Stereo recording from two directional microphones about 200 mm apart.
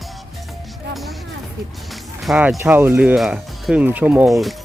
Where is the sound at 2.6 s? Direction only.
10° right (ahead or behind).